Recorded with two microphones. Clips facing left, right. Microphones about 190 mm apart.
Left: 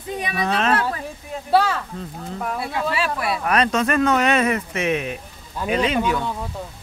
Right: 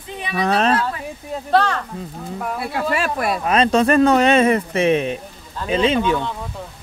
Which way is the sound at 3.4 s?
25° right (ahead or behind).